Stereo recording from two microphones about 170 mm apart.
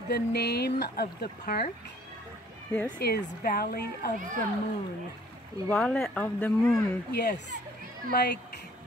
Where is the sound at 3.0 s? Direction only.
70° left (ahead or behind).